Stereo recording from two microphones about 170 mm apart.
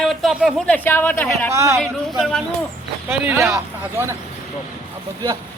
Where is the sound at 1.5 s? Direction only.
20° right (ahead or behind).